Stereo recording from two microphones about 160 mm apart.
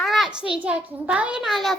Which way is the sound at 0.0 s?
Centre (ahead or behind).